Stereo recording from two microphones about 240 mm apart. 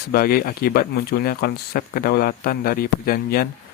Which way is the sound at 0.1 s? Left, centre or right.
Left.